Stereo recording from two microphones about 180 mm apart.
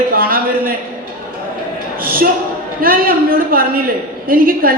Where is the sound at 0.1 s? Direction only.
55° right (ahead or behind).